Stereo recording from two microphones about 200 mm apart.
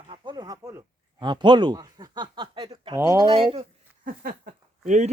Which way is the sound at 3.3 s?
25° right (ahead or behind).